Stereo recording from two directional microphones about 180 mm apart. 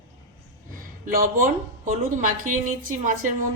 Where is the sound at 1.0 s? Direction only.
50° right (ahead or behind).